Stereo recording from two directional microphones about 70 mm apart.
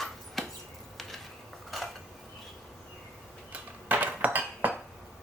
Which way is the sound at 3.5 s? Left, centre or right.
Right.